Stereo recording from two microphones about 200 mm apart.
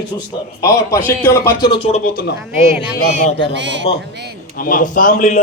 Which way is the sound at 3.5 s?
65° right (ahead or behind).